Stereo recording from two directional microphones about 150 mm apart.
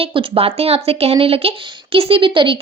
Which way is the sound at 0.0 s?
35° right (ahead or behind).